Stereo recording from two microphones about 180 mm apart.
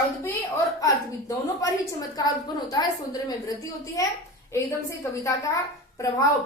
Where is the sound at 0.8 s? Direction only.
20° left (ahead or behind).